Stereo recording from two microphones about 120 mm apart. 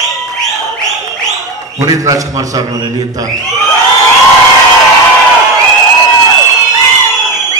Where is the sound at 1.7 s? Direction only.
30° right (ahead or behind).